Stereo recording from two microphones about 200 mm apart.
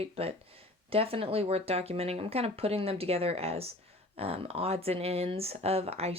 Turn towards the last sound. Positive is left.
turn(degrees=-30)  # may be behind; listen again after turning